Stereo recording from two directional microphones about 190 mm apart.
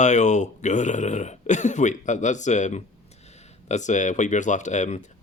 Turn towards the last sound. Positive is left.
turn(degrees=40)  # may be behind; listen again after turning